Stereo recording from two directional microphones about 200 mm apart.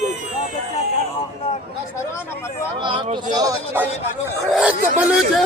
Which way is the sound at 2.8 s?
25° right (ahead or behind).